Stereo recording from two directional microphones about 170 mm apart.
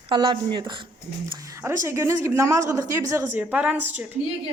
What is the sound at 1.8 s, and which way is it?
A woman's voice, 15° right (ahead or behind).